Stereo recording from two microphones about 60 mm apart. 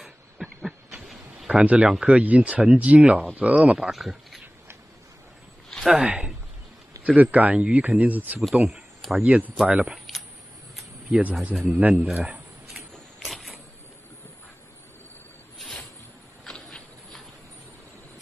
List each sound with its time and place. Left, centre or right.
0.0 s a sound: centre
1.5 s speech: centre
3.9 s speech: centre
5.9 s speech: centre
7.2 s speech: right
8.6 s a sound: centre
9.2 s speech: right
11.1 s speech: right
11.5 s speech: centre
11.8 s speech: right
12.7 s vehicle: centre
16.5 s insect: centre